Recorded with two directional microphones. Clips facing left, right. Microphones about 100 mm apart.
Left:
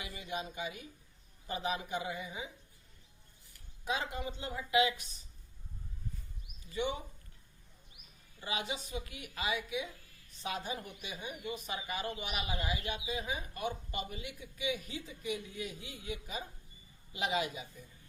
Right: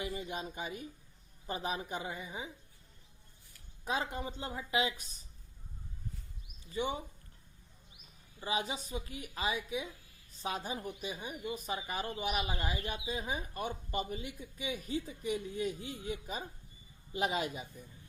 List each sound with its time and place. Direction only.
0.0 s speech: 40° right (ahead or behind)
3.8 s speech: 40° right (ahead or behind)
6.6 s speech: 35° right (ahead or behind)
8.4 s speech: 35° right (ahead or behind)